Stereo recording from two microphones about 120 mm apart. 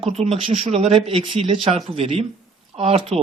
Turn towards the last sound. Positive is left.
turn(degrees=-60)  # may be behind; listen again after turning